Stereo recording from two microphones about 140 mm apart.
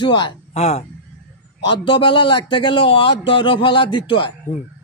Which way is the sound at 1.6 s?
35° left (ahead or behind).